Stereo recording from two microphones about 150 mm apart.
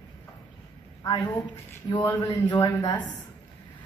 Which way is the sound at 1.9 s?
25° left (ahead or behind).